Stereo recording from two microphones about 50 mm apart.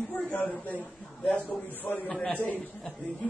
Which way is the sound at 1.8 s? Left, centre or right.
Left.